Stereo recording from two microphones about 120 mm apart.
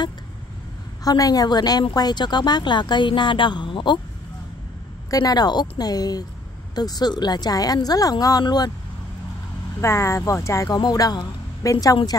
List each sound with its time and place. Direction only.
1.0 s speech: 30° left (ahead or behind)
5.1 s speech: 35° left (ahead or behind)
9.8 s speech: 25° left (ahead or behind)